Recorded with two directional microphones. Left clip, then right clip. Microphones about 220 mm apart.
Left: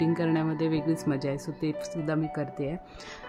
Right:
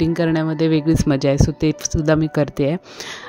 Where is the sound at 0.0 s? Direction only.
25° right (ahead or behind).